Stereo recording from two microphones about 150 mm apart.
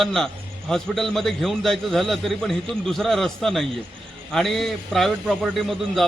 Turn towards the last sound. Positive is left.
turn(degrees=0)  # may be behind; listen again after turning